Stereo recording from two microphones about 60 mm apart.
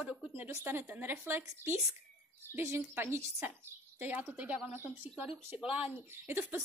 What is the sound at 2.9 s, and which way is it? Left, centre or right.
A woman's voice, right.